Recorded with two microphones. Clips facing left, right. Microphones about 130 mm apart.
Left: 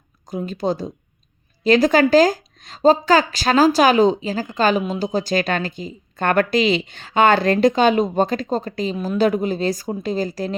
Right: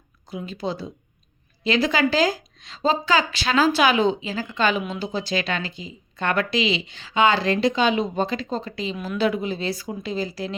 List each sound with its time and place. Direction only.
0.3 s speech: 45° left (ahead or behind)